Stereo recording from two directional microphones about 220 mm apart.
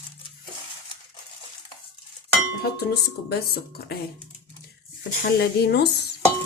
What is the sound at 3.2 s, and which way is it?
Speech, 45° left (ahead or behind).